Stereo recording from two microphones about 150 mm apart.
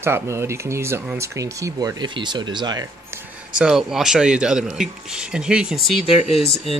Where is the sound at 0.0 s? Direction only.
15° right (ahead or behind).